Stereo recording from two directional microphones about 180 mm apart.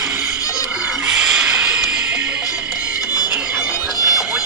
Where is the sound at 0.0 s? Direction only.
5° right (ahead or behind).